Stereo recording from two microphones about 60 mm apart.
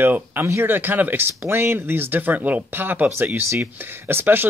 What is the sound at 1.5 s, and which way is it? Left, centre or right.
Speech, right.